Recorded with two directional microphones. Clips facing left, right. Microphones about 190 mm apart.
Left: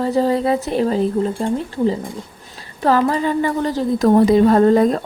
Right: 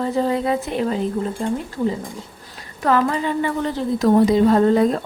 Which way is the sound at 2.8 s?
30° left (ahead or behind).